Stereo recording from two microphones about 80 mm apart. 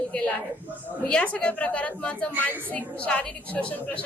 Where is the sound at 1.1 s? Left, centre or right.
Centre.